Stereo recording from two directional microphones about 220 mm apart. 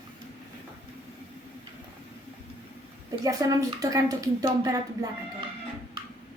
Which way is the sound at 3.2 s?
15° right (ahead or behind).